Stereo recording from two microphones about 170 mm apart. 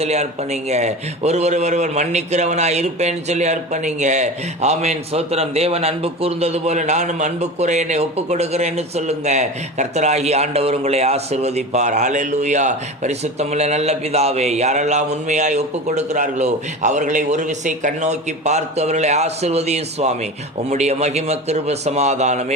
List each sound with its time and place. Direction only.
0.0 s a man's voice: 40° right (ahead or behind)